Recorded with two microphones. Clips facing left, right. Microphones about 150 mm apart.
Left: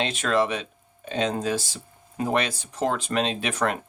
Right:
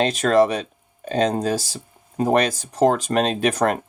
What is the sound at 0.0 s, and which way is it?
Speech, 40° right (ahead or behind).